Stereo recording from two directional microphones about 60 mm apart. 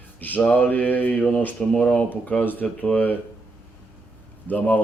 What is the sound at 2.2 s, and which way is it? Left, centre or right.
Mantra, left.